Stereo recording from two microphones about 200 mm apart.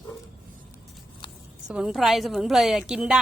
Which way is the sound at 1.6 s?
5° right (ahead or behind).